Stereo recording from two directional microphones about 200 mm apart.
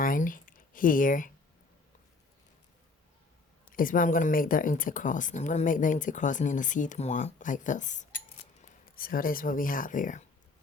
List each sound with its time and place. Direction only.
0.0 s speech: 45° left (ahead or behind)
3.8 s speech: 45° left (ahead or behind)